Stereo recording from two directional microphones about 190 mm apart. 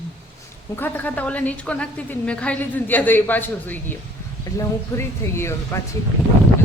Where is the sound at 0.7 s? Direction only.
10° left (ahead or behind).